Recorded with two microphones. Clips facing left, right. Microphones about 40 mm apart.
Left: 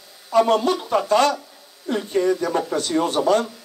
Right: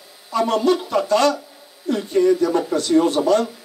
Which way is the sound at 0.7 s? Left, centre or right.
Left.